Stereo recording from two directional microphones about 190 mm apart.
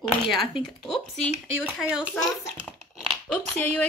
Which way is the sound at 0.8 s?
Centre (ahead or behind).